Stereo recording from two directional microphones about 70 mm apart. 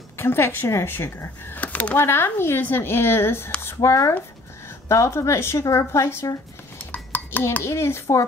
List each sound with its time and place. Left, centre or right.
0.2 s a woman's voice: left
2.0 s a woman's voice: left
6.9 s dishes: left
7.6 s a woman's voice: left